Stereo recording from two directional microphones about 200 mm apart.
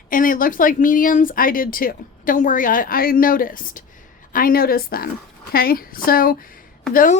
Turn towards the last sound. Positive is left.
turn(degrees=45)  # may be behind; listen again after turning